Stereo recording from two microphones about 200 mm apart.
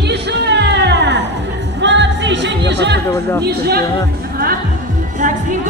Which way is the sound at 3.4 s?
55° right (ahead or behind).